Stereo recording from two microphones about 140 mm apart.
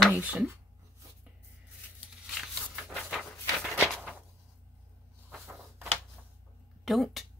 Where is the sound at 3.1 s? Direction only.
Centre (ahead or behind).